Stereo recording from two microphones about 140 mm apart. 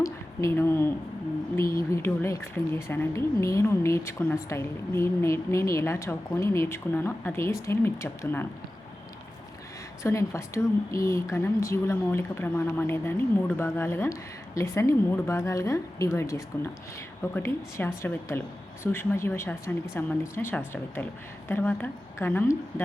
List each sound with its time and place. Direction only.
0.0 s a sound: 20° left (ahead or behind)
1.7 s a woman's voice: 20° left (ahead or behind)
10.0 s a woman's voice: 20° left (ahead or behind)